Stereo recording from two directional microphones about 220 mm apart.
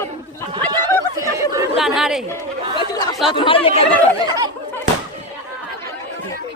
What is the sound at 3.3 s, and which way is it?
Speech, 25° left (ahead or behind).